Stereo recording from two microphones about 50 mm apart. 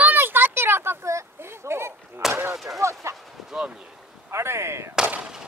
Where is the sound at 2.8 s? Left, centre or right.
Right.